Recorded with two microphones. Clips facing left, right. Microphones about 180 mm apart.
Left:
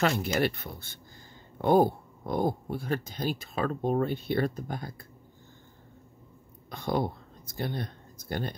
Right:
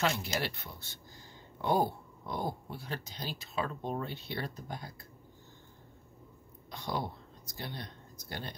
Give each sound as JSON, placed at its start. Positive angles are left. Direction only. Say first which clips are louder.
{"t": 0.0, "sound": "speech", "louder": "left 6 dB", "side_deg": 55}
{"t": 6.7, "sound": "speech", "louder": "left 7 dB", "side_deg": 55}